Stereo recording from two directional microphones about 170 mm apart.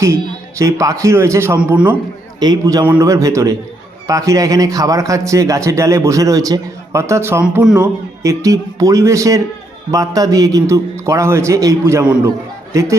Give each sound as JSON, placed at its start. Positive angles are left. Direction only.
{"t": 0.6, "sound": "a man's voice", "side_deg": -20}
{"t": 2.4, "sound": "speech", "side_deg": -20}
{"t": 8.2, "sound": "a man's voice", "side_deg": -20}